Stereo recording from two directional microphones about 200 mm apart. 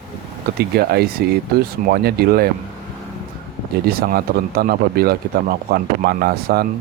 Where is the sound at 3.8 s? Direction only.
50° right (ahead or behind).